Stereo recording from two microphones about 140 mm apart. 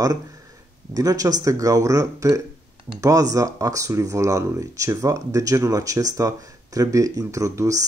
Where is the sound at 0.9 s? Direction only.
25° right (ahead or behind).